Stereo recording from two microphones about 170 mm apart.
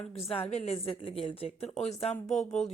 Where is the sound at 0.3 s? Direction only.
40° left (ahead or behind).